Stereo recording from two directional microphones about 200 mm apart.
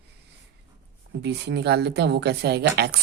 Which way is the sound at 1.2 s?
55° right (ahead or behind).